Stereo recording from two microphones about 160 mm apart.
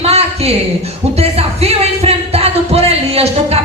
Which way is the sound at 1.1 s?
40° right (ahead or behind).